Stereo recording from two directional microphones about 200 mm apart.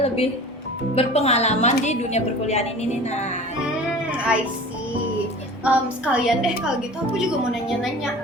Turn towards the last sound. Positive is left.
turn(degrees=-5)  # may be behind; listen again after turning